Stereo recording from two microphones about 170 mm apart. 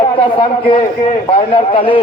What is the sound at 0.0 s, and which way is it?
A man's voice, 30° left (ahead or behind).